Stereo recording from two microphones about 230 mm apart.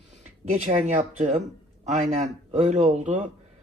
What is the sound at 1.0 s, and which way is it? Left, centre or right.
Speech, right.